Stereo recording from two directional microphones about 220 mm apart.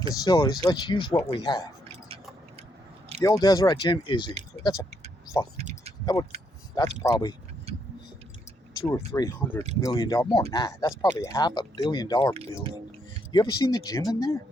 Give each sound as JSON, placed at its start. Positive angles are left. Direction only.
{"t": 0.1, "sound": "speech", "side_deg": 20}
{"t": 3.2, "sound": "speech", "side_deg": 15}
{"t": 5.5, "sound": "a sound", "side_deg": -30}
{"t": 6.7, "sound": "speech", "side_deg": 15}
{"t": 8.7, "sound": "speech", "side_deg": 15}
{"t": 13.3, "sound": "speech", "side_deg": 15}